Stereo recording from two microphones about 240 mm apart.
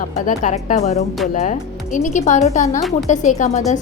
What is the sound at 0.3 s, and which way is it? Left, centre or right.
A woman's voice, left.